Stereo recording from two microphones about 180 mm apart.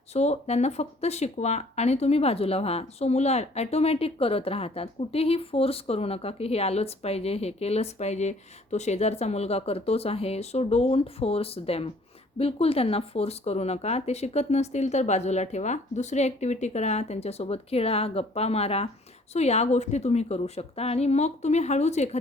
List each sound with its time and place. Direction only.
0.1 s speech: 35° left (ahead or behind)